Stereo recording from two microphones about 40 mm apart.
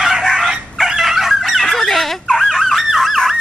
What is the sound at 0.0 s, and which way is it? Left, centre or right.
Chicken, centre.